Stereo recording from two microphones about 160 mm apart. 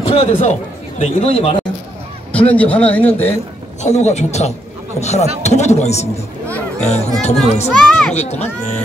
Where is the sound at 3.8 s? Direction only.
45° left (ahead or behind).